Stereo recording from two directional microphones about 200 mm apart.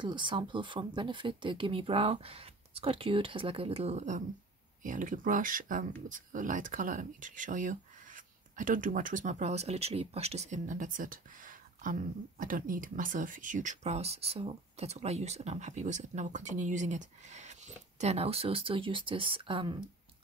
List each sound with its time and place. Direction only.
0.0 s speech: 25° right (ahead or behind)